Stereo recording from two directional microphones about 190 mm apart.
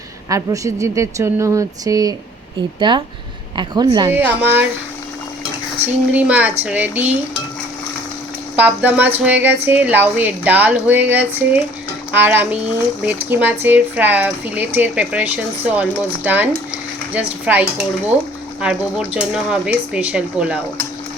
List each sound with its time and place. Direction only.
0.3 s speech: 15° right (ahead or behind)
4.1 s speech: 10° right (ahead or behind)
6.1 s speech: 10° right (ahead or behind)
8.5 s speech: 10° right (ahead or behind)
18.6 s stir: 5° right (ahead or behind)